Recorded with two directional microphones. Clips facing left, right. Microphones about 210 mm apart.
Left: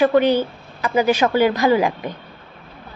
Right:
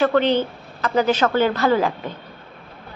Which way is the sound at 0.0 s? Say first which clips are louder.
Left 2 dB; 10° left (ahead or behind).